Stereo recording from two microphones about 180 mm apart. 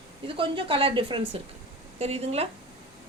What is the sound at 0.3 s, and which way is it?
A woman's voice, 30° right (ahead or behind).